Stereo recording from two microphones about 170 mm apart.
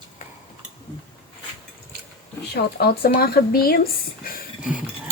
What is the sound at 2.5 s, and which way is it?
Speech, 70° left (ahead or behind).